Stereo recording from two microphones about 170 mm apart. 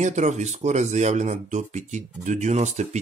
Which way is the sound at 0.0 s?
45° right (ahead or behind).